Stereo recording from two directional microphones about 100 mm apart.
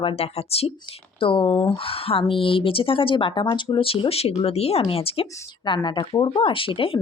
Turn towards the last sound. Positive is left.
turn(degrees=65)  # may be behind; listen again after turning